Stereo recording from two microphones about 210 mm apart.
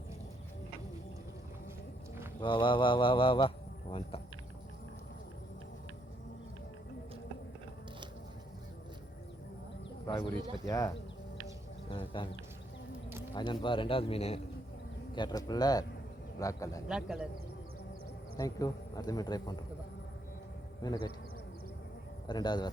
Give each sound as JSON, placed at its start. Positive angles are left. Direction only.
{"t": 2.4, "sound": "speech", "side_deg": 25}
{"t": 10.1, "sound": "speech", "side_deg": 20}
{"t": 13.3, "sound": "speech", "side_deg": 20}
{"t": 16.9, "sound": "a man's voice", "side_deg": -5}
{"t": 18.3, "sound": "speech", "side_deg": 15}
{"t": 20.8, "sound": "speech", "side_deg": 20}
{"t": 22.3, "sound": "speech", "side_deg": 20}